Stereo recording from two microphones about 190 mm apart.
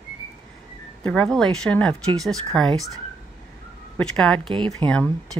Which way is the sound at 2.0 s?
20° right (ahead or behind).